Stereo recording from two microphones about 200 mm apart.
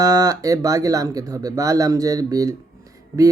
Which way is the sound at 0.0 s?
15° right (ahead or behind).